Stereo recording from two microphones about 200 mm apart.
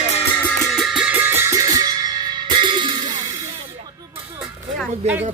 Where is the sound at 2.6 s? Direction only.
25° right (ahead or behind).